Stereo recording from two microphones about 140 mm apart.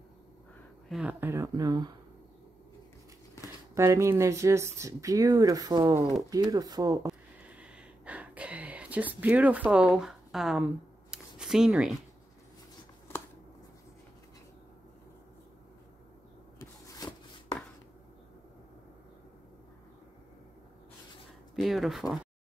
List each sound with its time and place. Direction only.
0.8 s speech: 5° right (ahead or behind)
1.2 s speech: 20° right (ahead or behind)
3.7 s speech: 20° right (ahead or behind)
7.4 s a sound: 10° right (ahead or behind)
16.5 s a sound: 30° left (ahead or behind)
21.5 s speech: centre (ahead or behind)